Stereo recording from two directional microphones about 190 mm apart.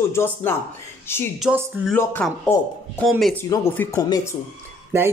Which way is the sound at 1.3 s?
Centre (ahead or behind).